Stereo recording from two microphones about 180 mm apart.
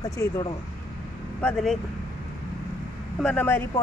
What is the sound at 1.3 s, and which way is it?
Speech, 5° left (ahead or behind).